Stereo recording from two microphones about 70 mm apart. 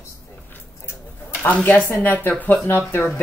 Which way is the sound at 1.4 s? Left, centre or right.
Left.